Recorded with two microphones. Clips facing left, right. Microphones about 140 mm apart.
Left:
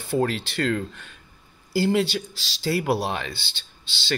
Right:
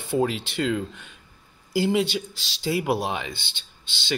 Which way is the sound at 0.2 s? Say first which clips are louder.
Even; 15° right (ahead or behind).